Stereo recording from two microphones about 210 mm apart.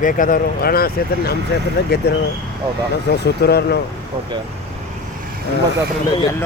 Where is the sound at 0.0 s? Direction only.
40° left (ahead or behind).